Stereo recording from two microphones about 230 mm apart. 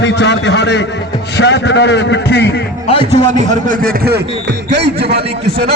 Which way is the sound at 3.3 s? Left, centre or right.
Right.